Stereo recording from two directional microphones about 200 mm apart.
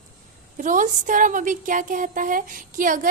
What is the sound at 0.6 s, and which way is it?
Speech, 40° right (ahead or behind).